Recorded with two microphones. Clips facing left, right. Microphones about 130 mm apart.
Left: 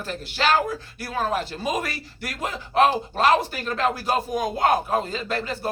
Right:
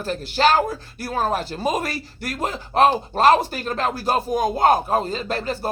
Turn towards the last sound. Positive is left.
turn(degrees=-35)  # may be behind; listen again after turning